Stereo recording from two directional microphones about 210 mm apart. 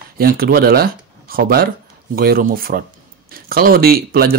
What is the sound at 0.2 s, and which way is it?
Speech, 45° right (ahead or behind).